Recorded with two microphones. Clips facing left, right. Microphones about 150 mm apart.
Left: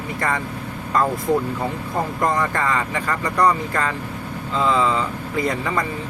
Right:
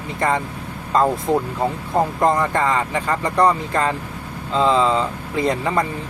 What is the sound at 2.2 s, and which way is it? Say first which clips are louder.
Speech: right 1 dB; 25° right (ahead or behind).